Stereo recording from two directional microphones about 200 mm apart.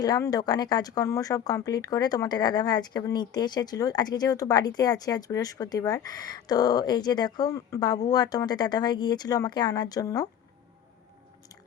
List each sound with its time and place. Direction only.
0.0 s speech: 20° left (ahead or behind)